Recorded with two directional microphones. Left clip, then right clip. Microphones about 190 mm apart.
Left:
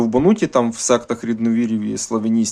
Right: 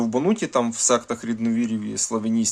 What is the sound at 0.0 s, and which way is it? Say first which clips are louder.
Speech: left 6 dB; 10° left (ahead or behind).